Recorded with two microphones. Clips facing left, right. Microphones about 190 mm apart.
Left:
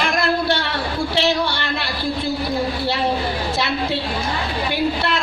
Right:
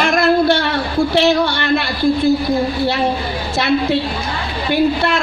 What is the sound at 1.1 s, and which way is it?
Speech, 50° right (ahead or behind).